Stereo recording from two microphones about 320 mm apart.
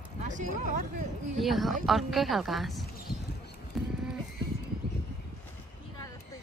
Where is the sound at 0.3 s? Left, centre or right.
Right.